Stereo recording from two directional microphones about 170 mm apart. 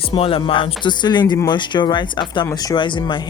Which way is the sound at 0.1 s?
30° left (ahead or behind).